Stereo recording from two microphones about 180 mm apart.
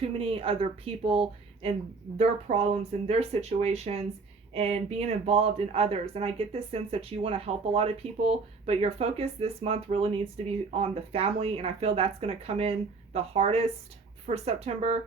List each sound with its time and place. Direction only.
0.2 s speech: 30° right (ahead or behind)